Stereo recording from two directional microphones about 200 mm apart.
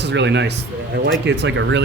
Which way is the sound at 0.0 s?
60° right (ahead or behind).